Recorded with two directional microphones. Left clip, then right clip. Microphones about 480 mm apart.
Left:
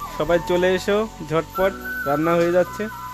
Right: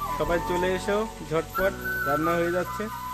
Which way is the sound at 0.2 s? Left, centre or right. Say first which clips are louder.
Left 8 dB; centre.